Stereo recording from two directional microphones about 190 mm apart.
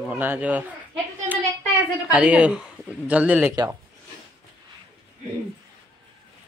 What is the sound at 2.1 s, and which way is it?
Speech, 5° right (ahead or behind).